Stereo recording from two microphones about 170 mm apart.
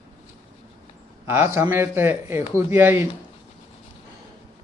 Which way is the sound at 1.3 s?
15° right (ahead or behind).